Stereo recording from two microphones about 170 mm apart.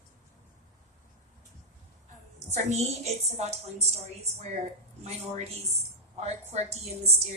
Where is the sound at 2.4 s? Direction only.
40° right (ahead or behind).